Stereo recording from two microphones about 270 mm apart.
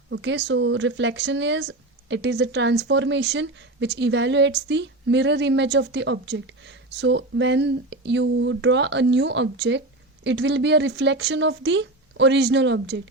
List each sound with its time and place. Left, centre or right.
0.1 s speech: right